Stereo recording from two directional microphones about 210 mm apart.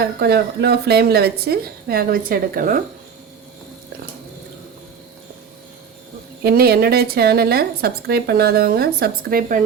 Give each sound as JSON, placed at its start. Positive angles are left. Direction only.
{"t": 0.0, "sound": "a woman's voice", "side_deg": -50}
{"t": 6.4, "sound": "a woman's voice", "side_deg": -45}